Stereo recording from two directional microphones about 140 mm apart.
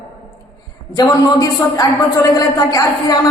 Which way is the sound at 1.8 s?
25° left (ahead or behind).